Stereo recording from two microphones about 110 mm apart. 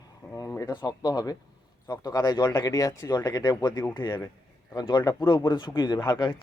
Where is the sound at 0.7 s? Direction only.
40° left (ahead or behind).